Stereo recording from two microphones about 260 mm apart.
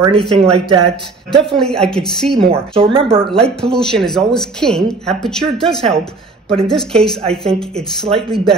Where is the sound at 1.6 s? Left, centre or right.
Centre.